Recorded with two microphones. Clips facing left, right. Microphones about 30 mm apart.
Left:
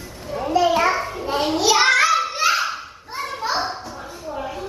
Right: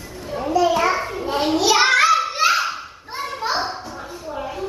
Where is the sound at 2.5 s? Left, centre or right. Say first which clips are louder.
Right 1 dB; centre.